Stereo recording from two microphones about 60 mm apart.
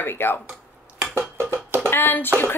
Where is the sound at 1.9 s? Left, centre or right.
Left.